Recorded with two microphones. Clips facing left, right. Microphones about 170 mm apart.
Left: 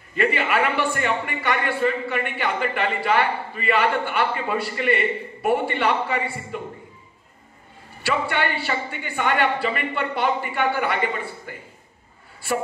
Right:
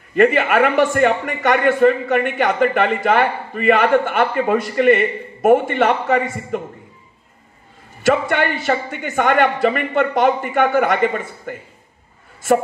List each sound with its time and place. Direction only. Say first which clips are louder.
0.1 s a man's voice: right 8 dB; 45° right (ahead or behind)
8.0 s a man's voice: right 7 dB; 45° right (ahead or behind)